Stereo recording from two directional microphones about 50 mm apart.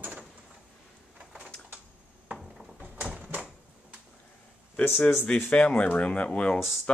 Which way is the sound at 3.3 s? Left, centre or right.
Right.